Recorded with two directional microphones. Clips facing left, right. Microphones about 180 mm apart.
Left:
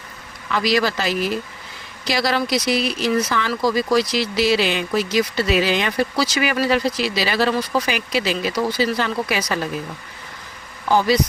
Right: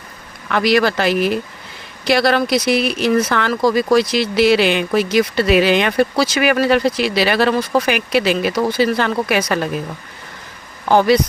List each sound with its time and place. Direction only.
0.4 s speech: 60° right (ahead or behind)
10.8 s speech: 60° right (ahead or behind)